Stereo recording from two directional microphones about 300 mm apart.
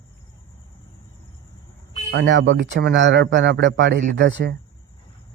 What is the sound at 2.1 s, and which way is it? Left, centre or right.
A man's voice, right.